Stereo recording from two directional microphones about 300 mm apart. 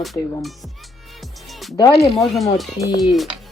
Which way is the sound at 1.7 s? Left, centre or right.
Centre.